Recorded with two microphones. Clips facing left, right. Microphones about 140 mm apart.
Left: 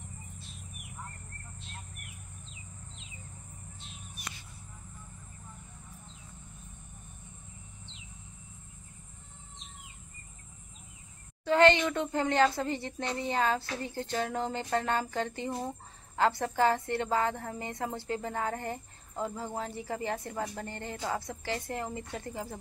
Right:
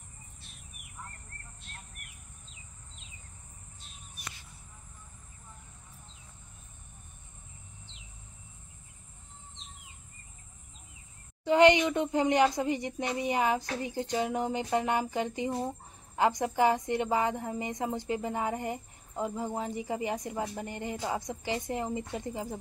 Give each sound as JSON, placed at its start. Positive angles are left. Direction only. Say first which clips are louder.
{"t": 11.4, "sound": "a woman's voice", "louder": "right 2 dB", "side_deg": -15}